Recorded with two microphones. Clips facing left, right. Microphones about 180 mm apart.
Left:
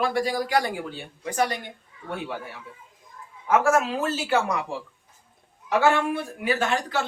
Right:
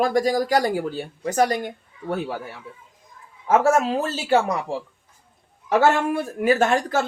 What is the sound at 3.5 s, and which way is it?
Speech, 35° right (ahead or behind).